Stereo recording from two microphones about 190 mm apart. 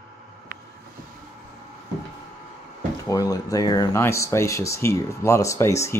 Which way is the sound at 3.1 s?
20° left (ahead or behind).